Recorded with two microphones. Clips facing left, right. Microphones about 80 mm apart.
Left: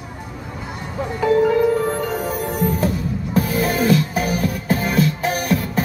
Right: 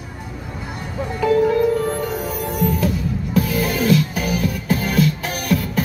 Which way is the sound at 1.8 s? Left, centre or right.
Left.